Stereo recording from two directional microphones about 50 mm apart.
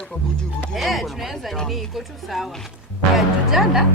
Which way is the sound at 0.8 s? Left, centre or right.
Centre.